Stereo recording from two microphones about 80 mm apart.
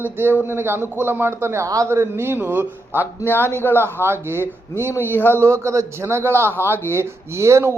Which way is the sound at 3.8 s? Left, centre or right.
Right.